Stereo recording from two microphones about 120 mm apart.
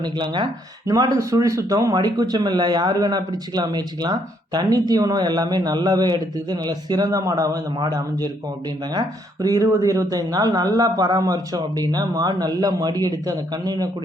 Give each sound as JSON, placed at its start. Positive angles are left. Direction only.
{"t": 0.0, "sound": "speech", "side_deg": -40}